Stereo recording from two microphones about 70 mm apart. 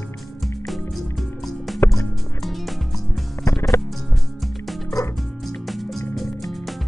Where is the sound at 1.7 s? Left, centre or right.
Left.